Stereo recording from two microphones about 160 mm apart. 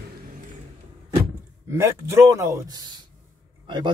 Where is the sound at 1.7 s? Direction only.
15° right (ahead or behind).